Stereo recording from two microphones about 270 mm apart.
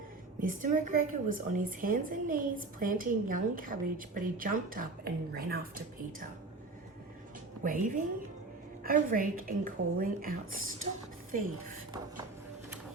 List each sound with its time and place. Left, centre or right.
0.3 s a woman's voice: right
7.6 s a woman's voice: right